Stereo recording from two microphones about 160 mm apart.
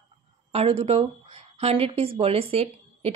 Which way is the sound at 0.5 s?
35° right (ahead or behind).